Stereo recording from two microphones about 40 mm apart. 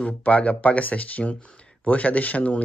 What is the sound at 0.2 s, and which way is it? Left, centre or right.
Speech, left.